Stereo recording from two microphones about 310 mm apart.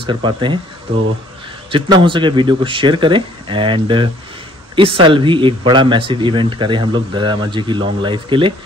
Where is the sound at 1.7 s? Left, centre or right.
Centre.